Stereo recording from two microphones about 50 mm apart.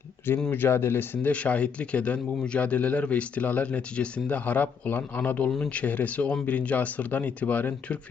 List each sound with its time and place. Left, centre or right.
0.5 s speech: left